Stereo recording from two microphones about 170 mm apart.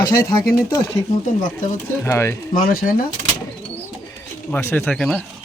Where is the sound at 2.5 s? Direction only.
55° left (ahead or behind).